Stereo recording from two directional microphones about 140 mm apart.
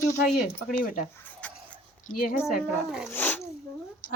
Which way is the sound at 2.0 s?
85° left.